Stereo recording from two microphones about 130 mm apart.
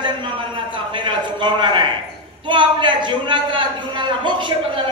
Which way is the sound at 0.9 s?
40° right (ahead or behind).